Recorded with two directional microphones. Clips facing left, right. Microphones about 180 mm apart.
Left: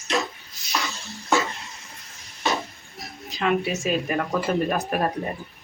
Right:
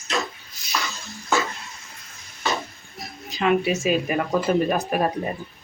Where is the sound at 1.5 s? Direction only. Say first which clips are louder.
Even; 15° left (ahead or behind).